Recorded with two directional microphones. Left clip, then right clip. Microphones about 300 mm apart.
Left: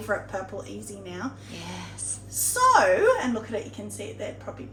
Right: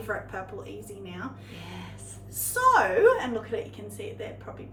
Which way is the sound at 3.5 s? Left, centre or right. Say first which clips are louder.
Even; centre.